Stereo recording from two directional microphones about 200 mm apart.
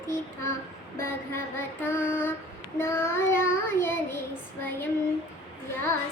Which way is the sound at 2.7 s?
10° left (ahead or behind).